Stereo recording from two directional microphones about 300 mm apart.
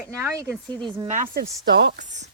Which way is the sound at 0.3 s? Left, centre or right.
Centre.